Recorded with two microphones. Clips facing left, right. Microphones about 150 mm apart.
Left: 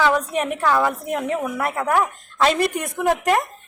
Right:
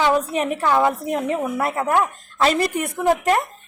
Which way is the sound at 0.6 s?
20° right (ahead or behind).